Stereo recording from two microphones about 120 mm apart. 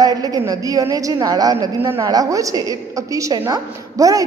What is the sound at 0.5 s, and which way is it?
A woman's voice, 30° right (ahead or behind).